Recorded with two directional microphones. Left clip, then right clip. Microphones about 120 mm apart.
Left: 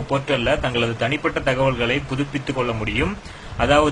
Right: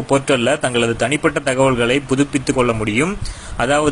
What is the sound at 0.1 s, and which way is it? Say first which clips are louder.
Speech: right 5 dB; 50° right (ahead or behind).